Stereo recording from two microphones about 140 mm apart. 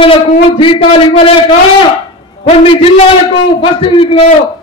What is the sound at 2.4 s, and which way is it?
A man's voice, 45° left (ahead or behind).